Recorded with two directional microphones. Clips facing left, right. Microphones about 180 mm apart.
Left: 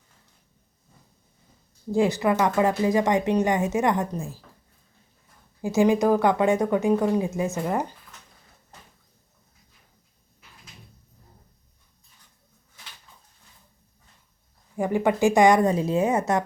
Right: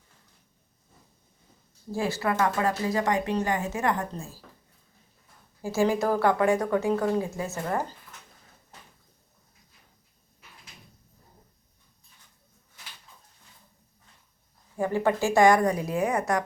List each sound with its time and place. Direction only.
1.9 s speech: 20° left (ahead or behind)
5.6 s speech: 20° left (ahead or behind)
14.8 s speech: 15° left (ahead or behind)